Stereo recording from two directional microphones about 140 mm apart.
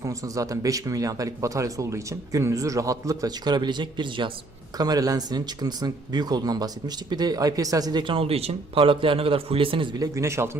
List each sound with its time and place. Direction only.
0.0 s speech: 25° right (ahead or behind)